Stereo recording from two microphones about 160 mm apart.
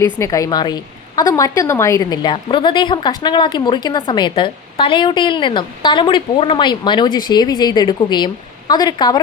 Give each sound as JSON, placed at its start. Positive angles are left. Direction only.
{"t": 0.0, "sound": "a woman's voice", "side_deg": 20}